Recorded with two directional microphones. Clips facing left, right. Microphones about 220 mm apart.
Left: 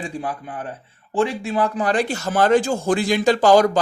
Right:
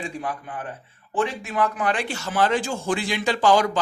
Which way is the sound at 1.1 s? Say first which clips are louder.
Left 4 dB; 30° left (ahead or behind).